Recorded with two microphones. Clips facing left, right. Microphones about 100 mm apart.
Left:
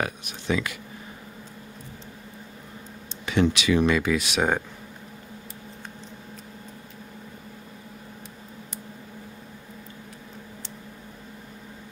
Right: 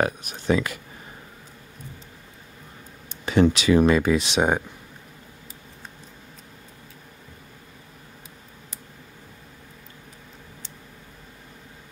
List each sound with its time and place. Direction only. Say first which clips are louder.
0.0 s speech: right 5 dB; 40° right (ahead or behind)
3.3 s speech: right 4 dB; 35° right (ahead or behind)